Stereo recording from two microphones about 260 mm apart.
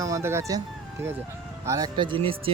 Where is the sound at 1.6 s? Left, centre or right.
Centre.